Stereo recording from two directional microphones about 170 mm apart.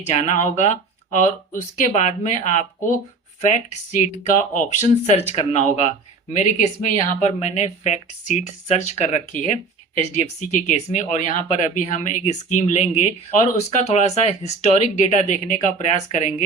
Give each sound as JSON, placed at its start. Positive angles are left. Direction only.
{"t": 0.0, "sound": "speech", "side_deg": 40}